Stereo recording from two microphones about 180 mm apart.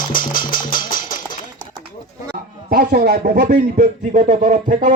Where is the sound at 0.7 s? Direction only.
25° left (ahead or behind).